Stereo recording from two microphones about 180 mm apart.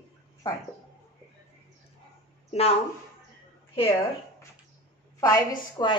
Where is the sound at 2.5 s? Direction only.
35° left (ahead or behind).